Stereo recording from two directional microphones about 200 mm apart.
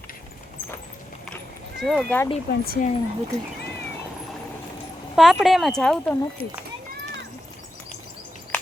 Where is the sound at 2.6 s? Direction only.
45° left (ahead or behind).